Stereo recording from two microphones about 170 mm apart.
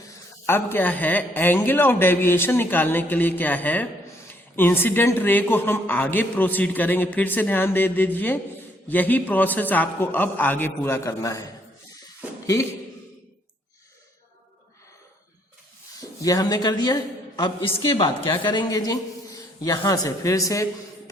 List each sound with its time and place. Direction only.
0.4 s a man's voice: 15° left (ahead or behind)
16.0 s a man's voice: 20° left (ahead or behind)